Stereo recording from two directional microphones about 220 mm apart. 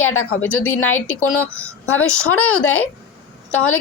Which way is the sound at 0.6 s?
70° left (ahead or behind).